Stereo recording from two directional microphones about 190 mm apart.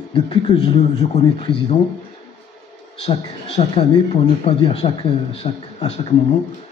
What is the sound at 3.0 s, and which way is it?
A man's voice, 30° left (ahead or behind).